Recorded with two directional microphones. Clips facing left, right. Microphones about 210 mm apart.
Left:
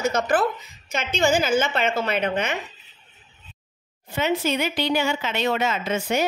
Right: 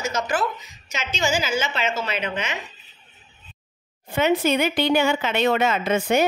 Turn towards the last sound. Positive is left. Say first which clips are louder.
# right 4 dB
turn(degrees=-55)  # may be behind; listen again after turning